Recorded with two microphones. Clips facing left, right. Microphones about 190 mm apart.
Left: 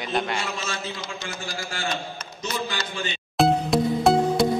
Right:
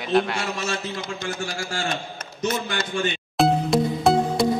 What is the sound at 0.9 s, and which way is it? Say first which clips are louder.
A man's voice: right 5 dB; 55° right (ahead or behind).